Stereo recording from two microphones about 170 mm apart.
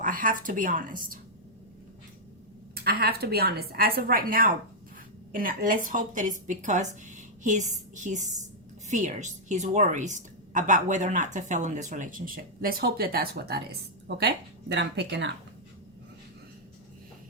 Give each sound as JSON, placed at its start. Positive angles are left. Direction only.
{"t": 0.0, "sound": "a woman's voice", "side_deg": -55}
{"t": 2.7, "sound": "a woman's voice", "side_deg": -65}
{"t": 14.2, "sound": "speech", "side_deg": -80}